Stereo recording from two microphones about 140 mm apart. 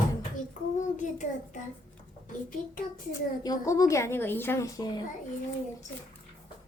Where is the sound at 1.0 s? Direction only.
60° left (ahead or behind).